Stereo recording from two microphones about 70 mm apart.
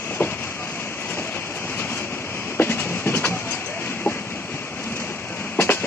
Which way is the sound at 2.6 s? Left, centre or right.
Left.